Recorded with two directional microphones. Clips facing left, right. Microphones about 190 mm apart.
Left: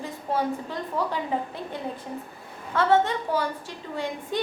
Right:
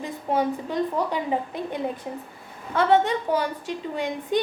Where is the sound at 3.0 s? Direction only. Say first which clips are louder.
Right 2 dB; 15° right (ahead or behind).